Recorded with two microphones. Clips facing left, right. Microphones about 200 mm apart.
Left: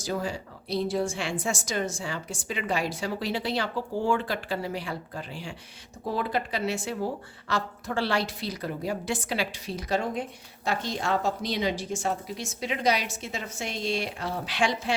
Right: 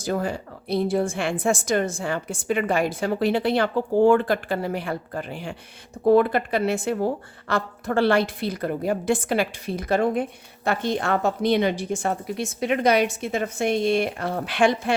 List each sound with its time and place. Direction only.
0.0 s speech: 55° right (ahead or behind)